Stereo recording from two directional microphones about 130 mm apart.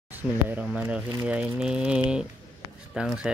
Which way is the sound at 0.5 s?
10° right (ahead or behind).